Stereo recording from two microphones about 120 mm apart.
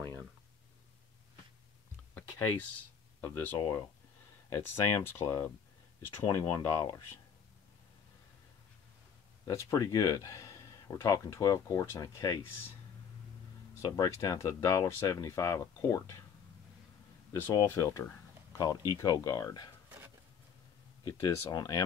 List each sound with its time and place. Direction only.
3.2 s speech: 15° left (ahead or behind)
9.5 s speech: 25° left (ahead or behind)
13.8 s speech: 30° left (ahead or behind)
17.3 s speech: 25° left (ahead or behind)
21.0 s speech: 35° left (ahead or behind)